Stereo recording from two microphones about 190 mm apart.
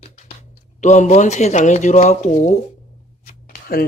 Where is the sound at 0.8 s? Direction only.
40° left (ahead or behind).